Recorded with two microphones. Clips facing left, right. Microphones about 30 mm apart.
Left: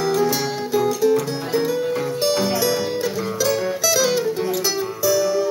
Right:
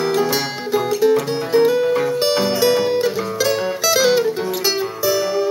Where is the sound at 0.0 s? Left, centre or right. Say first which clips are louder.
Right 1 dB; right.